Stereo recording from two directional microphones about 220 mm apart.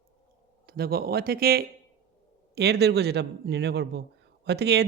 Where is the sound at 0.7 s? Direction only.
45° right (ahead or behind).